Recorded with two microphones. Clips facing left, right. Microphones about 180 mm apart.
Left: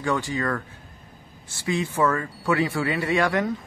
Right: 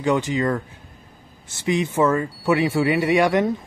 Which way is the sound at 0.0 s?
20° right (ahead or behind).